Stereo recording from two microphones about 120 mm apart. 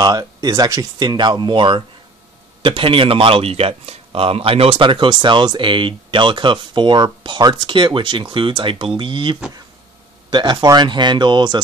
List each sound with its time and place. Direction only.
0.0 s speech: 30° right (ahead or behind)